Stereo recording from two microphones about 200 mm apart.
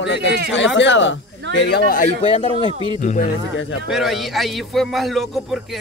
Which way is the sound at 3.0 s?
40° left (ahead or behind).